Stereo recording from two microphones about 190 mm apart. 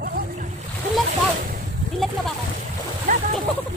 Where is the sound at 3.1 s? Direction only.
40° right (ahead or behind).